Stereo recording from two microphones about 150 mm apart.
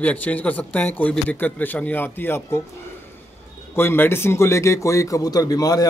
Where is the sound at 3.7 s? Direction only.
15° left (ahead or behind).